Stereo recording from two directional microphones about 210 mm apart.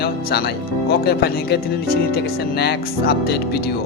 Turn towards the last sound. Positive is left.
turn(degrees=50)  # may be behind; listen again after turning